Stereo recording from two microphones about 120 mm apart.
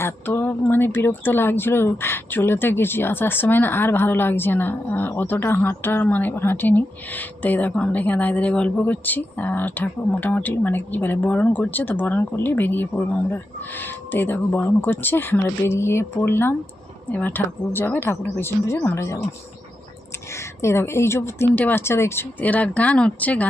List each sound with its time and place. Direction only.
0.0 s a woman's voice: 20° left (ahead or behind)
20.3 s a woman's voice: 20° left (ahead or behind)